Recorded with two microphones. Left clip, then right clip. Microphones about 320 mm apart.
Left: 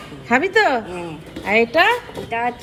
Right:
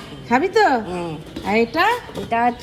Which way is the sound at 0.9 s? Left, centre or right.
Right.